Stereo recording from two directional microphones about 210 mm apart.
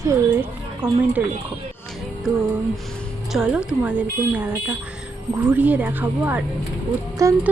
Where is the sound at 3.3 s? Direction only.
5° right (ahead or behind).